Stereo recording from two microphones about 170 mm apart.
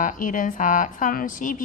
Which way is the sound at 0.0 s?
50° left (ahead or behind).